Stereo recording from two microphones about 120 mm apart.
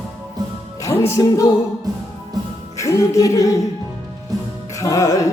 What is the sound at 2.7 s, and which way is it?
Speech, 25° left (ahead or behind).